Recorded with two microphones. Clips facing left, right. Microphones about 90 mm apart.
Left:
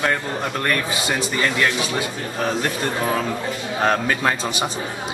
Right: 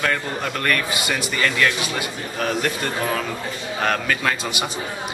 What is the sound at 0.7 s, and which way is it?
A man's voice, 25° left (ahead or behind).